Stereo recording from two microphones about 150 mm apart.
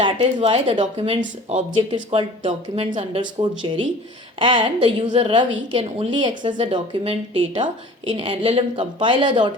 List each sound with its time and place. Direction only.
0.0 s a woman's voice: 35° right (ahead or behind)